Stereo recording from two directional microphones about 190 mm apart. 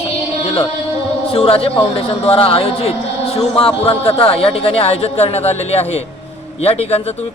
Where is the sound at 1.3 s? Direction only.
30° left (ahead or behind).